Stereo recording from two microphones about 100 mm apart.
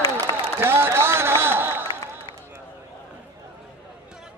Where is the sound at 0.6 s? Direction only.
25° right (ahead or behind).